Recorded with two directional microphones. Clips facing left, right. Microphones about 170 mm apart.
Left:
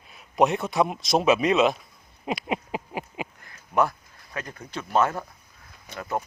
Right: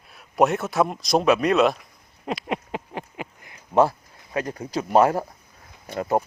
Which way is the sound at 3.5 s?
30° right (ahead or behind).